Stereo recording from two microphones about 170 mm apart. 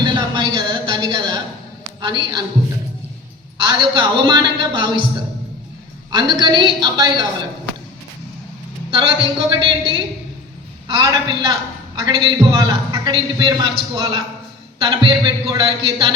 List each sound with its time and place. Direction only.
0.0 s a sound: 25° right (ahead or behind)
2.0 s a woman's voice: 25° right (ahead or behind)
3.6 s a man's voice: 25° right (ahead or behind)
6.1 s a man's voice: 25° right (ahead or behind)
8.9 s a man's voice: 25° right (ahead or behind)